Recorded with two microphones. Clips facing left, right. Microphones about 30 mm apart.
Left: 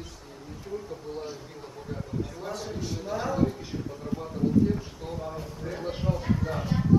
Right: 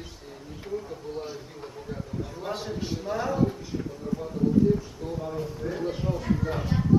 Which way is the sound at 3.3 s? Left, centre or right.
Centre.